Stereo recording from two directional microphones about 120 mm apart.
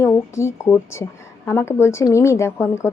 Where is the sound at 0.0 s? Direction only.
25° left (ahead or behind).